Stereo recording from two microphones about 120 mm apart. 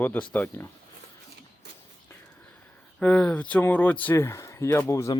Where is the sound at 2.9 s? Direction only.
10° left (ahead or behind).